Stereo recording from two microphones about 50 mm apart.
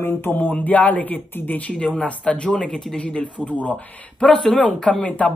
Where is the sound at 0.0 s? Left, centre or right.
Left.